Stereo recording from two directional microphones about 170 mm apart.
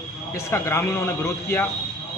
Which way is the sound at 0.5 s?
15° left (ahead or behind).